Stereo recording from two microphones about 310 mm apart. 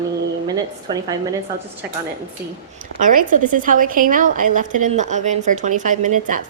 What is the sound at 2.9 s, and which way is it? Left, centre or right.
A woman's voice, right.